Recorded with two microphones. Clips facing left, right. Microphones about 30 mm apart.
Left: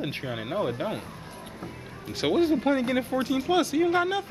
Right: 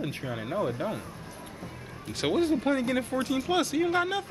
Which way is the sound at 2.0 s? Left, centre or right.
Centre.